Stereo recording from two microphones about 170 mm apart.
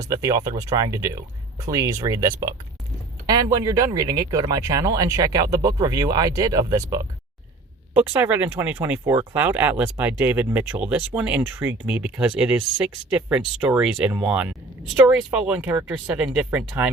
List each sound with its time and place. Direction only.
0.0 s speech: 20° right (ahead or behind)